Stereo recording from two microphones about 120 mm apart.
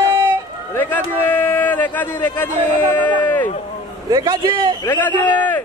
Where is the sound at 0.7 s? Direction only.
15° left (ahead or behind).